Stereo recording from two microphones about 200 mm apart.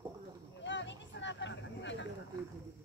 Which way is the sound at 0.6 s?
65° left (ahead or behind).